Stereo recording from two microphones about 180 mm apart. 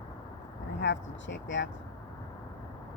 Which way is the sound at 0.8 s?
85° left.